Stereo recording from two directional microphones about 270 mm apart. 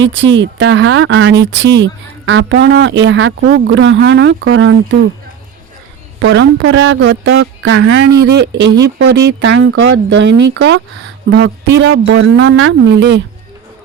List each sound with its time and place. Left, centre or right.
0.0 s speech: right
6.1 s speech: right